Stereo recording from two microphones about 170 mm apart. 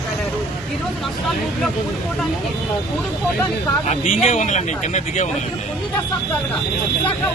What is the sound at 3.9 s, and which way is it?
A man's voice, 45° left (ahead or behind).